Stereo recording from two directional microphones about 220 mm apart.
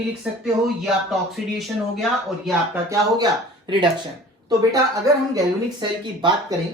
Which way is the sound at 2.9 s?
15° right (ahead or behind).